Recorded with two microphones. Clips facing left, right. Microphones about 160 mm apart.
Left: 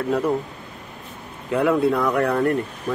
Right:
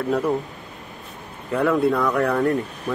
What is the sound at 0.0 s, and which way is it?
Speech, centre (ahead or behind).